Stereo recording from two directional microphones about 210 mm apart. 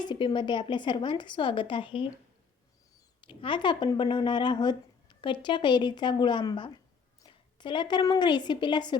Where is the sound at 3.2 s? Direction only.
25° left (ahead or behind).